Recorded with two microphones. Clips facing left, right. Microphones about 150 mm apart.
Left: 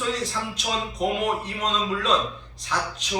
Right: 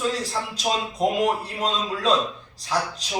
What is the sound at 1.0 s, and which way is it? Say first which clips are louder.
Speech: right 3 dB; 35° right (ahead or behind).